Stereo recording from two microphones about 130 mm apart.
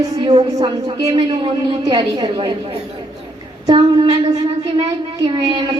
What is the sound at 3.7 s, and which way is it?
Speech, 30° right (ahead or behind).